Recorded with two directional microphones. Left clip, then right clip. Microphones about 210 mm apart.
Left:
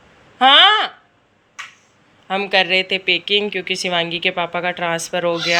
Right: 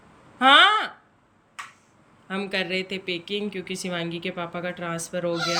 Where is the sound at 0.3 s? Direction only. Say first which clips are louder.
Left 5 dB; 10° right (ahead or behind).